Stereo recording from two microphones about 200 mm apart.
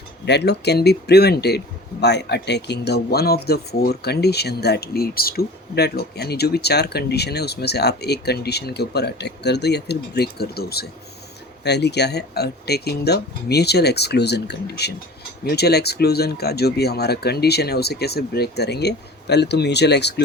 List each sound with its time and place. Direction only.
0.3 s speech: 55° left (ahead or behind)